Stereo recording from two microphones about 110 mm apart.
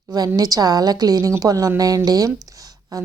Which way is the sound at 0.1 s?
35° right (ahead or behind).